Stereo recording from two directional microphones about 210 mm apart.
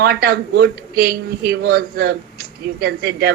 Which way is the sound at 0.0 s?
45° right (ahead or behind).